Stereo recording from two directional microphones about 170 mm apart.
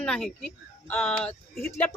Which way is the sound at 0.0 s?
5° left (ahead or behind).